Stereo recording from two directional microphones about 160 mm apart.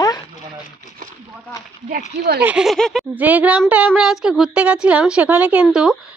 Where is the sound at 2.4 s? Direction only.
5° right (ahead or behind).